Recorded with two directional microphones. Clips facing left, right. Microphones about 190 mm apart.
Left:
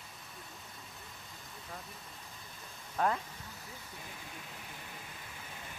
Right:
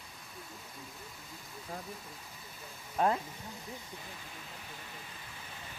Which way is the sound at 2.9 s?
20° right (ahead or behind).